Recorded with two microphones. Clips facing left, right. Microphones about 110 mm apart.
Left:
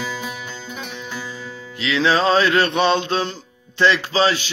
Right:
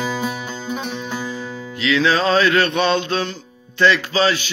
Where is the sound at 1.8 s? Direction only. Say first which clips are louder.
Right 1 dB; 25° left (ahead or behind).